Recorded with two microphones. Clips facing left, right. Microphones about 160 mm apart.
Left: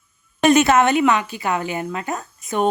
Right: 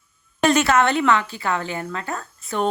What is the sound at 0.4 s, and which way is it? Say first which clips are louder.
A woman's voice: left 3 dB; 20° left (ahead or behind).